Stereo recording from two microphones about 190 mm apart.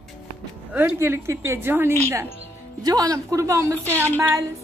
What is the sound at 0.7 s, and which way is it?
A woman's voice, 10° right (ahead or behind).